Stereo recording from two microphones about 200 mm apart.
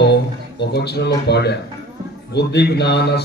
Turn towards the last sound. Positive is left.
turn(degrees=55)  # may be behind; listen again after turning